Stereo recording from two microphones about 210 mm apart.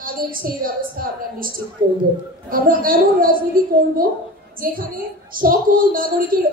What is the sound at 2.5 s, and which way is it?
A woman's voice, 40° right (ahead or behind).